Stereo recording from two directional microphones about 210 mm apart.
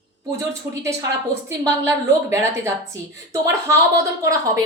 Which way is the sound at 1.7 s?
15° right (ahead or behind).